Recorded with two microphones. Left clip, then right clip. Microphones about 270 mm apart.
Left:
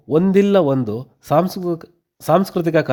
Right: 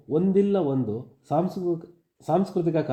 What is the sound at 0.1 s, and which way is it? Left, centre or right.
Speech, left.